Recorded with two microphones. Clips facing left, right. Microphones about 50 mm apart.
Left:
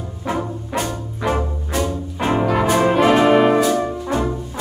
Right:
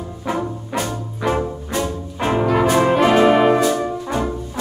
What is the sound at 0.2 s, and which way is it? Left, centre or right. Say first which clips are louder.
Trombone: even; centre.